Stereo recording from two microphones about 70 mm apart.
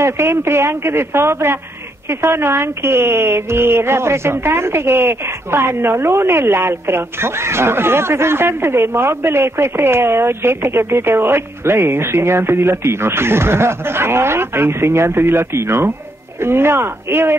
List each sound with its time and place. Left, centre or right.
0.0 s speech: right